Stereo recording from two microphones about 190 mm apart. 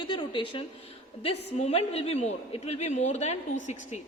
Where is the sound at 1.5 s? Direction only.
35° left (ahead or behind).